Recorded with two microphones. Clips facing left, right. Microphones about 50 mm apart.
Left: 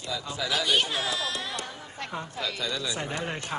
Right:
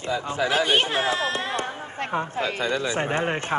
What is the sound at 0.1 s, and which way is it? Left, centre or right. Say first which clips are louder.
Speech: right 7 dB; right.